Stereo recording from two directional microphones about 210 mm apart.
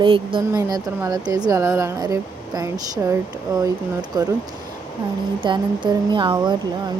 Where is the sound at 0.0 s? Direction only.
25° right (ahead or behind).